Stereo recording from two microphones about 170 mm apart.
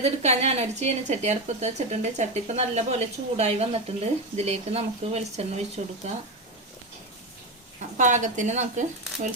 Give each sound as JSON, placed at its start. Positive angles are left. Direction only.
{"t": 0.0, "sound": "a woman's voice", "side_deg": -40}
{"t": 7.9, "sound": "speech", "side_deg": -45}